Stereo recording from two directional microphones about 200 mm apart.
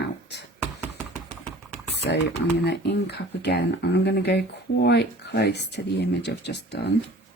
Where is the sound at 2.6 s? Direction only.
55° left (ahead or behind).